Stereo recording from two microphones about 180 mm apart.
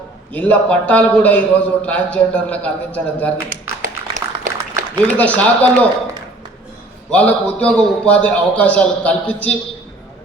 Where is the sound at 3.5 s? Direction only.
45° right (ahead or behind).